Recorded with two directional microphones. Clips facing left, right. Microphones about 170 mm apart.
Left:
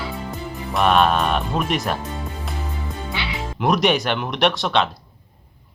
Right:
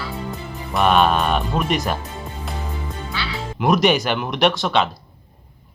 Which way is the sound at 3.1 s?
20° left (ahead or behind).